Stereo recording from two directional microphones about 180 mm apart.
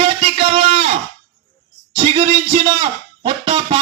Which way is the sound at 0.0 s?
30° right (ahead or behind).